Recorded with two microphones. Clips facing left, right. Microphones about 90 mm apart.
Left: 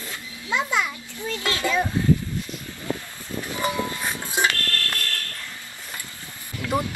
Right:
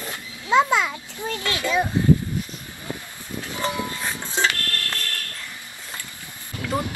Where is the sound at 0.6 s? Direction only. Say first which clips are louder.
Right 6 dB; 90° right.